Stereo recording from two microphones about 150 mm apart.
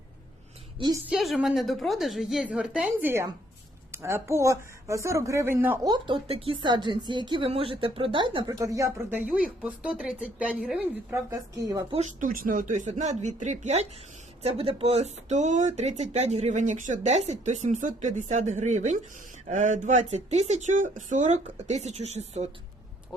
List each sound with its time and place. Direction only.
0.8 s speech: 25° right (ahead or behind)
1.0 s a woman's voice: centre (ahead or behind)
5.8 s speech: 25° right (ahead or behind)
6.2 s speech: 40° right (ahead or behind); by 10.8 s 5° right (ahead or behind)
11.1 s speech: 25° right (ahead or behind)
11.9 s speech: 50° right (ahead or behind)